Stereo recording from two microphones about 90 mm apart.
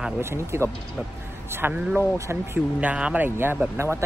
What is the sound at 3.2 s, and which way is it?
Speech, 25° right (ahead or behind).